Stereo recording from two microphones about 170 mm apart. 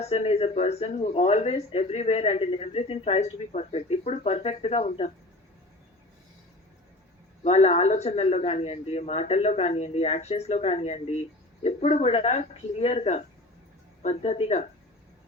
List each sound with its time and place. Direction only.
0.0 s speech: 40° left (ahead or behind)
7.4 s speech: 40° left (ahead or behind)